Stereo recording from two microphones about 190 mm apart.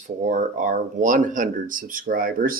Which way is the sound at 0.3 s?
40° right (ahead or behind).